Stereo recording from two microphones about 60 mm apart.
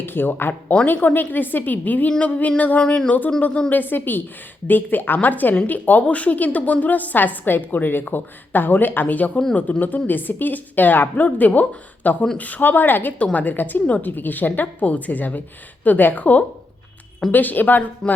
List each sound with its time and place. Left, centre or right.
0.0 s a woman's voice: left
2.8 s speech: centre
3.1 s a woman's voice: left
13.1 s a woman's voice: left